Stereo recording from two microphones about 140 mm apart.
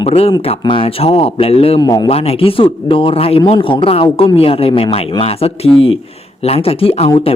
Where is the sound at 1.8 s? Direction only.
30° left (ahead or behind).